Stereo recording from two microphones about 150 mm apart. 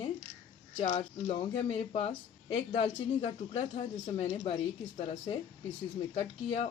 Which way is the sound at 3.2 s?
40° left (ahead or behind).